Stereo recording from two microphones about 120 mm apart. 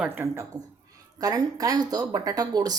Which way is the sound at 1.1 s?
30° right (ahead or behind).